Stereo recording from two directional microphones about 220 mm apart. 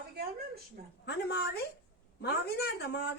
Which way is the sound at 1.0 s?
45° left (ahead or behind).